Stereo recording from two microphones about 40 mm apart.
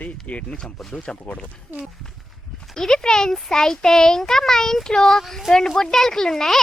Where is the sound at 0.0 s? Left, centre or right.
Left.